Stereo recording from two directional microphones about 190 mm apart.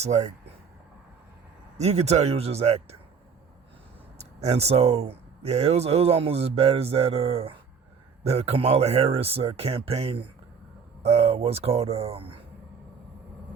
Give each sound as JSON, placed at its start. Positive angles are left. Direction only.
{"t": 0.0, "sound": "speech", "side_deg": -35}
{"t": 1.8, "sound": "speech", "side_deg": -35}
{"t": 4.2, "sound": "speech", "side_deg": -35}